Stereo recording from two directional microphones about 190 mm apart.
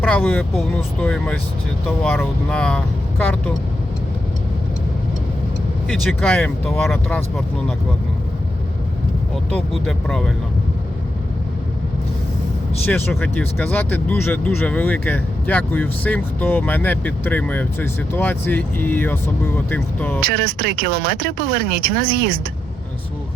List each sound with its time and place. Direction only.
0.0 s speech: 10° left (ahead or behind)
5.9 s speech: 5° left (ahead or behind)
9.3 s speech: 5° left (ahead or behind)
12.8 s speech: 10° left (ahead or behind)
20.2 s speech: 55° right (ahead or behind)